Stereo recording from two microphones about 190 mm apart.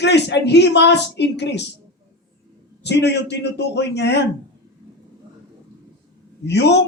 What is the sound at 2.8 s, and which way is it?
A woman's voice, 65° left (ahead or behind).